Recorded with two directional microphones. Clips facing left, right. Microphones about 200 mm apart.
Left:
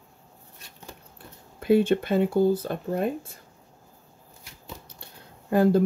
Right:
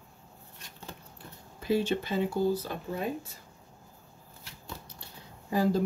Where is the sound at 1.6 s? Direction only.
55° left (ahead or behind).